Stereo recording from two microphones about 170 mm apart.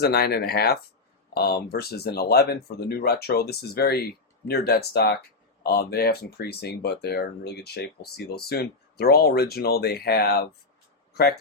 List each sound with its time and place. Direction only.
0.0 s speech: 70° left (ahead or behind)